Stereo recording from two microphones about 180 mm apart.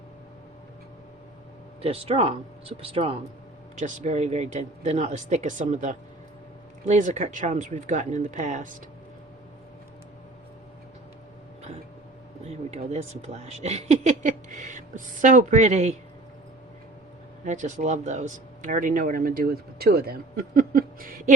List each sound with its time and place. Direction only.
1.8 s speech: 35° right (ahead or behind)
12.5 s speech: 35° right (ahead or behind)
17.4 s speech: 40° right (ahead or behind)